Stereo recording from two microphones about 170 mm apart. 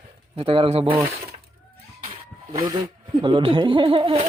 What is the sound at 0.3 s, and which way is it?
Speech, 35° right (ahead or behind).